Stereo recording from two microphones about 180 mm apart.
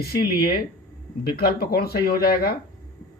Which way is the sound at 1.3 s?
60° left (ahead or behind).